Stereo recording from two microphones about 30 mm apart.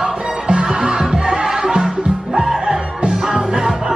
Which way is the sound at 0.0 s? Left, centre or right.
Right.